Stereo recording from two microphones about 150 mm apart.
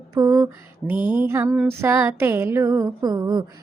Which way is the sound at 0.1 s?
20° right (ahead or behind).